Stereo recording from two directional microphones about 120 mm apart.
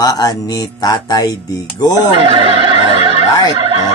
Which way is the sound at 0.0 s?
30° left (ahead or behind).